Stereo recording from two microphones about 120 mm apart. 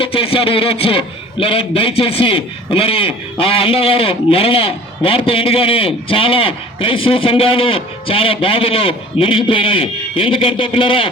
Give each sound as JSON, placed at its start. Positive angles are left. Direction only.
{"t": 0.0, "sound": "a man's voice", "side_deg": 50}